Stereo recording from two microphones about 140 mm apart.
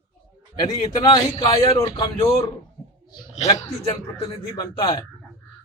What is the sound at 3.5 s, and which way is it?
A man's voice, 25° left (ahead or behind).